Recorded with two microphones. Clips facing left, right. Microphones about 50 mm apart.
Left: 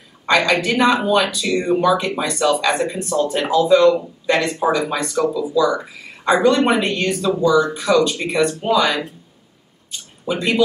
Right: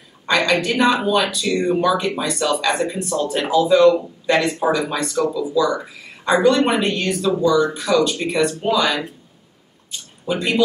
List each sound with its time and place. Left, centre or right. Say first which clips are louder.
0.3 s speech: left 2 dB; centre
10.2 s speech: left 1 dB; centre